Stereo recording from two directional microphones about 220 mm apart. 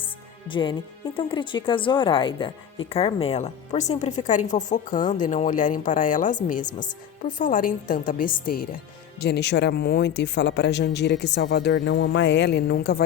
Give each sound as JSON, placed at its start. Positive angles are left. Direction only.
{"t": 0.0, "sound": "a woman's voice", "side_deg": 20}
{"t": 9.2, "sound": "speech", "side_deg": 50}